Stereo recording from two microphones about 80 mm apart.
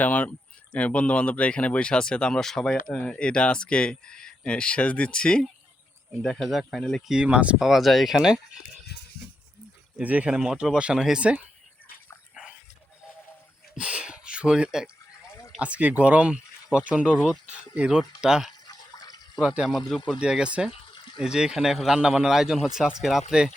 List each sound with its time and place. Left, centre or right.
0.0 s speech: left; by 7.0 s centre
7.1 s speech: centre
7.6 s speech: centre
10.0 s speech: centre
13.7 s a sound: centre
15.5 s speech: centre
18.7 s water: left
20.1 s speech: centre
20.7 s water: left
21.2 s speech: centre